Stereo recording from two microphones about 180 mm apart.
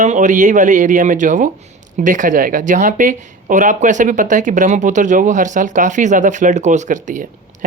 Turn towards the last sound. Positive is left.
turn(degrees=-45)  # may be behind; listen again after turning